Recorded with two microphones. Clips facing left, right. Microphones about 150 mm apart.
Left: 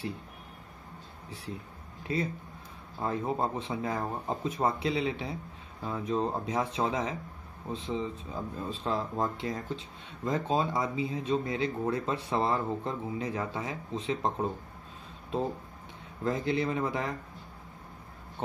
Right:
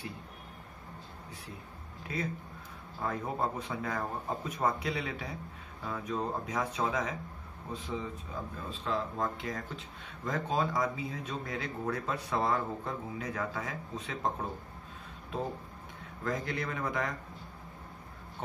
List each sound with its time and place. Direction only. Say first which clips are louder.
3.0 s speech: left 3 dB; 25° left (ahead or behind)
16.3 s speech: left 5 dB; 25° left (ahead or behind)